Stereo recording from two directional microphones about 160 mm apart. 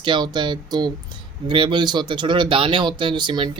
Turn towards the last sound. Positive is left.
turn(degrees=-30)  # may be behind; listen again after turning